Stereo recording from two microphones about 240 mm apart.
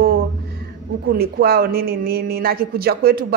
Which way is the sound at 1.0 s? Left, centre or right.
Right.